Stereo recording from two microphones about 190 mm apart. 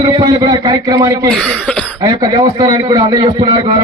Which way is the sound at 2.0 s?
20° right (ahead or behind).